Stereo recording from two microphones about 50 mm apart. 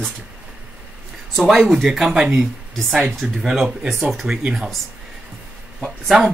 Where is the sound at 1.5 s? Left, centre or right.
Centre.